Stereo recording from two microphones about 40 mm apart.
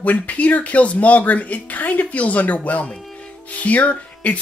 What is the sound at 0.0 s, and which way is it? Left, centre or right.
Speech, left.